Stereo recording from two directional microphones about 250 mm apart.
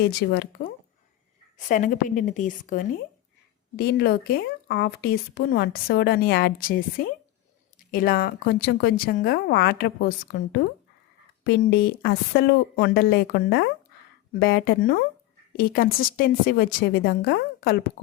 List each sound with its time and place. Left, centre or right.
0.2 s speech: left
1.5 s speech: left